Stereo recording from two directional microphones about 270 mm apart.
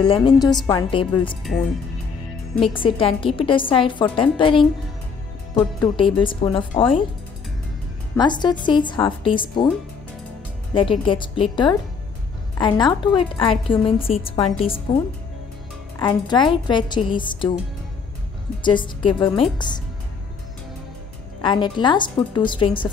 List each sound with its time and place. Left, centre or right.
0.0 s a woman's voice: centre
2.7 s a woman's voice: centre
8.2 s a woman's voice: centre
10.7 s a woman's voice: centre
16.0 s a woman's voice: centre
18.6 s a woman's voice: centre
21.4 s a woman's voice: centre